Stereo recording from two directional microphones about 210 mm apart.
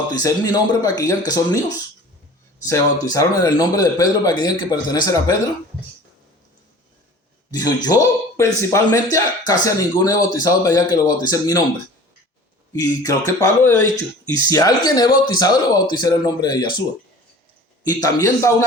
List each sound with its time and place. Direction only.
0.1 s speech: 15° left (ahead or behind)
2.6 s speech: 15° left (ahead or behind)
7.5 s speech: 15° left (ahead or behind)
12.7 s speech: 15° left (ahead or behind)
17.8 s speech: 15° left (ahead or behind)